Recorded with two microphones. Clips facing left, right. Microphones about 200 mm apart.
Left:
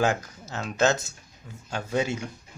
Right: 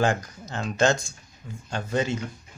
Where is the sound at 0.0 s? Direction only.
5° left (ahead or behind).